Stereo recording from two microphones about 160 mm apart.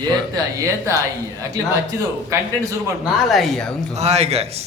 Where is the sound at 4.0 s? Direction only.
40° right (ahead or behind).